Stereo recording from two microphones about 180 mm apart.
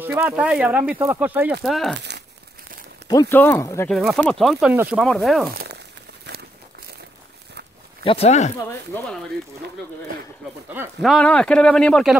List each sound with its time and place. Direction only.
0.0 s speech: 10° right (ahead or behind)
3.1 s speech: 15° left (ahead or behind)
3.9 s speech: centre (ahead or behind)
8.0 s speech: 30° left (ahead or behind)
11.0 s speech: 5° left (ahead or behind)